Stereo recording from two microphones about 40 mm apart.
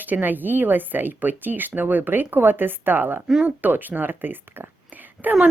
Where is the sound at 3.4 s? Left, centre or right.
Right.